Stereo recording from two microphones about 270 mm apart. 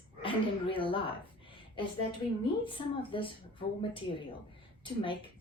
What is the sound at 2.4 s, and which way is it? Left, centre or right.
A woman's voice, centre.